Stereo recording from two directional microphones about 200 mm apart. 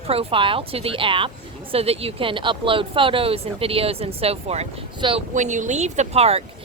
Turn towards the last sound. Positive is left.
turn(degrees=-30)  # may be behind; listen again after turning